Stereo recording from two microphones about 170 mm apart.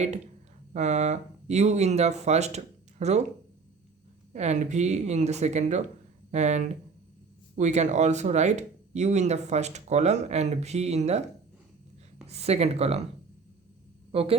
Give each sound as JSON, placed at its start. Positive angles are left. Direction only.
{"t": 0.7, "sound": "speech", "side_deg": -40}
{"t": 4.3, "sound": "speech", "side_deg": -40}
{"t": 12.3, "sound": "speech", "side_deg": -40}
{"t": 14.1, "sound": "speech", "side_deg": -35}